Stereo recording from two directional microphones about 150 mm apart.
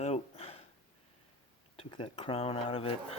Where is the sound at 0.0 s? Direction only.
45° left (ahead or behind).